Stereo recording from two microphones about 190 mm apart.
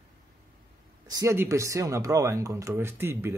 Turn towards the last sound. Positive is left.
turn(degrees=-15)  # may be behind; listen again after turning